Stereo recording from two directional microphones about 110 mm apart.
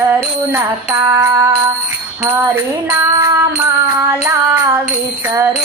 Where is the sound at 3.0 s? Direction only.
25° right (ahead or behind).